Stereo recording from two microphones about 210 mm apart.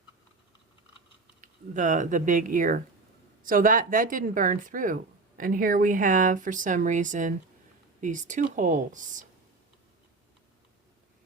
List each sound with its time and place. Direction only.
1.4 s speech: 35° right (ahead or behind)